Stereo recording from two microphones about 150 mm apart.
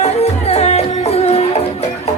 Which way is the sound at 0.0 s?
45° left (ahead or behind).